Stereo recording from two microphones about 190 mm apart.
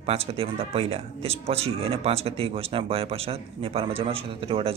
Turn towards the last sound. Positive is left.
turn(degrees=-30)  # may be behind; listen again after turning